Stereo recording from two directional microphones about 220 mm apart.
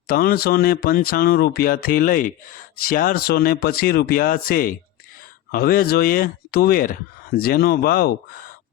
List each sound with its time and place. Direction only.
0.1 s speech: 45° left (ahead or behind)